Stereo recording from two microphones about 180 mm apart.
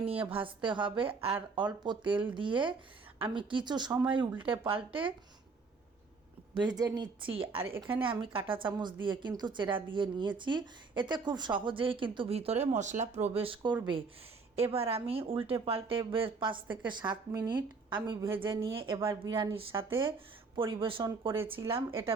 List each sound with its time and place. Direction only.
0.0 s a woman's voice: 30° right (ahead or behind)
6.6 s a woman's voice: 25° right (ahead or behind)
20.6 s speech: 15° right (ahead or behind)
20.8 s a woman's voice: 30° right (ahead or behind)